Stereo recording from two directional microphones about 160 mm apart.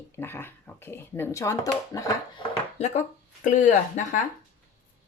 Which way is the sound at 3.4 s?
50° left (ahead or behind).